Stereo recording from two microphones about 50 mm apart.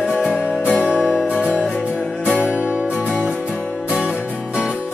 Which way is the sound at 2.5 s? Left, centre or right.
Right.